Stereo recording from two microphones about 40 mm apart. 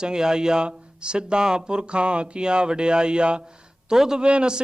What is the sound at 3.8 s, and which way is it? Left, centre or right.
Speech, centre.